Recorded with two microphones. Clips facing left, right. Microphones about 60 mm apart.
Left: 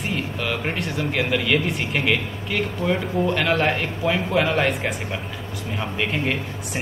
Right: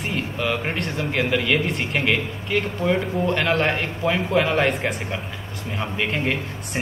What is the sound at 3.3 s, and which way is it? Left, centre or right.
A man's voice, centre.